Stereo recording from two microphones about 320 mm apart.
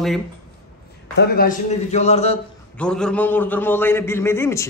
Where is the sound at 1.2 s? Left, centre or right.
Left.